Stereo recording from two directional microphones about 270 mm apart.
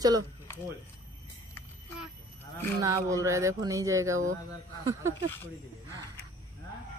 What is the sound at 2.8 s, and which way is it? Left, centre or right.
Music, centre.